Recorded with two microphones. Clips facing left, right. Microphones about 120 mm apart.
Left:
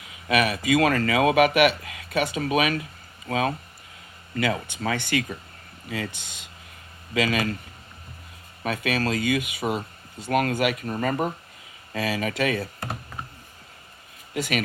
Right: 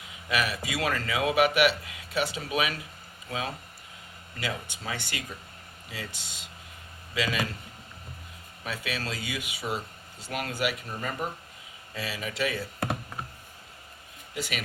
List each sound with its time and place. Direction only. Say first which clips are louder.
0.3 s speech: left 8 dB; 60° left (ahead or behind)
8.6 s speech: left 9 dB; 55° left (ahead or behind)
14.3 s speech: left 8 dB; 55° left (ahead or behind)